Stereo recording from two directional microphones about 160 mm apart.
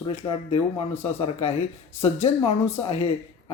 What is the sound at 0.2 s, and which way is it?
Speech, 25° left (ahead or behind).